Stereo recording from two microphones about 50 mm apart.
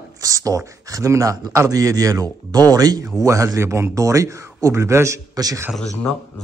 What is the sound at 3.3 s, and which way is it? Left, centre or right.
Speech, right.